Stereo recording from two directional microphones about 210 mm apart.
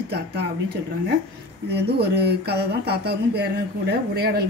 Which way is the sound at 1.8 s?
50° right (ahead or behind).